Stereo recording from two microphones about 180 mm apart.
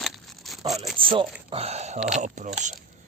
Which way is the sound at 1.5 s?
35° right (ahead or behind).